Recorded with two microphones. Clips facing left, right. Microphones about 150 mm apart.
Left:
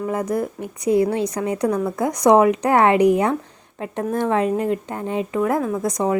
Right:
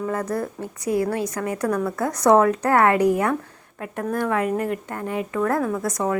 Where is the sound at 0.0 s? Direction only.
15° left (ahead or behind).